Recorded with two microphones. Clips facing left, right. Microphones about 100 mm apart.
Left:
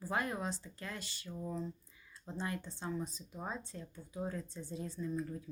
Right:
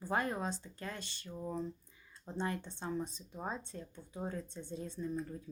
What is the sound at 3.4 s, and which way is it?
Speech, 35° right (ahead or behind).